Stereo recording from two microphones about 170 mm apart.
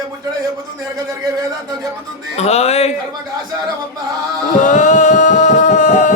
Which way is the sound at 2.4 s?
40° left (ahead or behind).